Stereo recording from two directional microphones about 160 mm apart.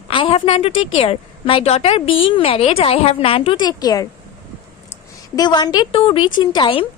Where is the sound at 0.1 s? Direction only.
35° left (ahead or behind).